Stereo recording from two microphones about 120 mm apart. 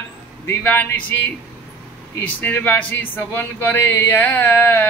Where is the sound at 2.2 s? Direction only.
15° left (ahead or behind).